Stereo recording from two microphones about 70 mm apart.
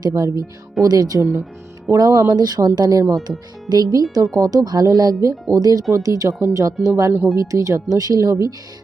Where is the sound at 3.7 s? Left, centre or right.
Right.